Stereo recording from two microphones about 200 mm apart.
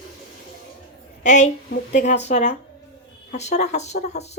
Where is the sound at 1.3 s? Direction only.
35° left (ahead or behind).